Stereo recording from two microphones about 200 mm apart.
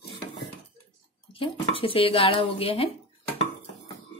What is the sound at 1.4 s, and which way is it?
A woman's voice, 25° left (ahead or behind).